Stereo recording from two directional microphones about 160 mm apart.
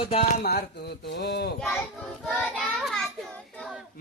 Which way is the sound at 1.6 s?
5° left (ahead or behind).